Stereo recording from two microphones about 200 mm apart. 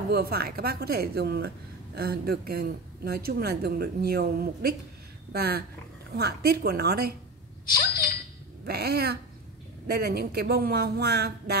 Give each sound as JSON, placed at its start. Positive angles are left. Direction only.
{"t": 0.1, "sound": "speech", "side_deg": -50}
{"t": 8.6, "sound": "speech", "side_deg": -50}